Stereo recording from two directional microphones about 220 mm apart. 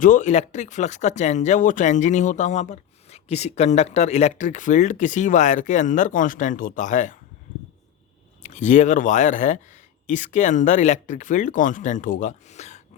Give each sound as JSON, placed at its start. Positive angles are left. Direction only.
{"t": 0.0, "sound": "speech", "side_deg": 35}
{"t": 8.4, "sound": "speech", "side_deg": 35}